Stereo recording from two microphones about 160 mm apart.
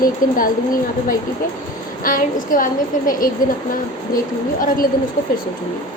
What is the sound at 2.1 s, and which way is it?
Speech, 60° left (ahead or behind).